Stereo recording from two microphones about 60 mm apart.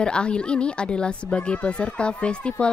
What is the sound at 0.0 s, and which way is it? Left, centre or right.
A woman's voice, centre.